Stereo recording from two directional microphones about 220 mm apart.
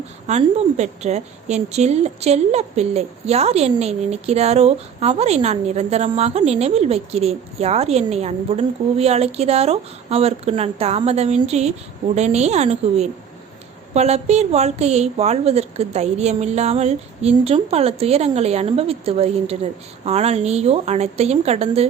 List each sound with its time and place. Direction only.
0.3 s a woman's voice: 30° right (ahead or behind)